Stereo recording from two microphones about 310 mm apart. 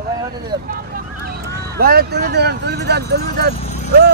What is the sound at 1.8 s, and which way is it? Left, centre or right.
Speech, right.